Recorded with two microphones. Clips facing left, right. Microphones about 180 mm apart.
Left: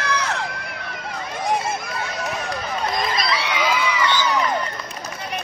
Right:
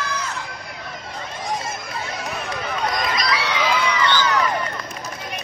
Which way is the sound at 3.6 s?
5° left (ahead or behind).